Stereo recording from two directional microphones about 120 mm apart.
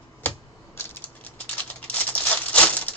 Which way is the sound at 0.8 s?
20° left (ahead or behind).